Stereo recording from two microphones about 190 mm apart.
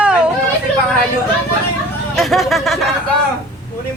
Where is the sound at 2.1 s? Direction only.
Centre (ahead or behind).